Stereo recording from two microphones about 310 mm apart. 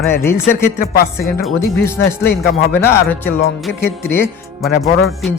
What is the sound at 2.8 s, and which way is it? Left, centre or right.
Speech, centre.